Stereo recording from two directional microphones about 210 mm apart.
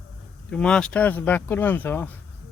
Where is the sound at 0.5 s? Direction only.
5° left (ahead or behind).